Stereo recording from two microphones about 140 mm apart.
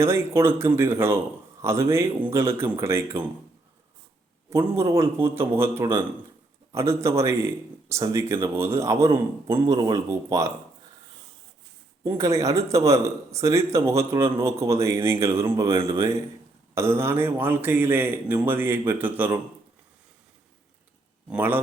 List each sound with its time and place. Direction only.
0.0 s a man's voice: 20° right (ahead or behind)
4.4 s a man's voice: 20° right (ahead or behind)
12.0 s a man's voice: 20° right (ahead or behind)
21.2 s a man's voice: 15° right (ahead or behind)